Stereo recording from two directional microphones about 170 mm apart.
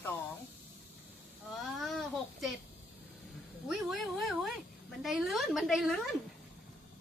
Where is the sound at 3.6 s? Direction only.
Centre (ahead or behind).